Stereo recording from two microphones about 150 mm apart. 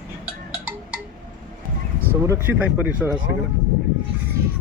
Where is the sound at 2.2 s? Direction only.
15° right (ahead or behind).